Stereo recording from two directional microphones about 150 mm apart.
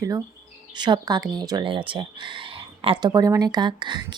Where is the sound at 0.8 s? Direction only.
30° right (ahead or behind).